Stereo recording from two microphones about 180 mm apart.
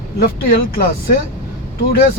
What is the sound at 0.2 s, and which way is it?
Speech, 55° left (ahead or behind).